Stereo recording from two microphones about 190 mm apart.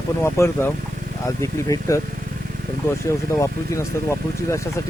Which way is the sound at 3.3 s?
15° left (ahead or behind).